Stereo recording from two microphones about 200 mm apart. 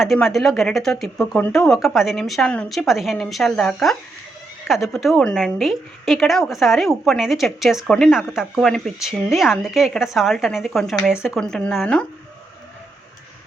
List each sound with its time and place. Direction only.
0.0 s a woman's voice: centre (ahead or behind)